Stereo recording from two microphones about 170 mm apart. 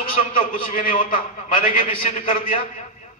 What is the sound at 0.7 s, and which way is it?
A man's voice, 50° left (ahead or behind).